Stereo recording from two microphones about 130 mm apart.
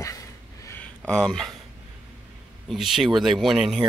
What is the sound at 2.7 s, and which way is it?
Speech, centre (ahead or behind).